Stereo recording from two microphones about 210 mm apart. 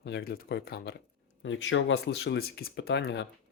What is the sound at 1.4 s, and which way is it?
Speech, 65° left (ahead or behind).